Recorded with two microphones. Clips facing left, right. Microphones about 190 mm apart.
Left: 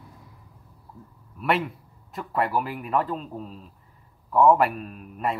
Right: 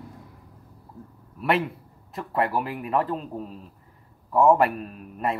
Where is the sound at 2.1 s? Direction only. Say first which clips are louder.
Even; 35° right (ahead or behind).